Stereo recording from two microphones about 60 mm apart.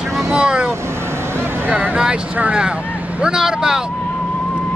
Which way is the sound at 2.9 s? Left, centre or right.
Right.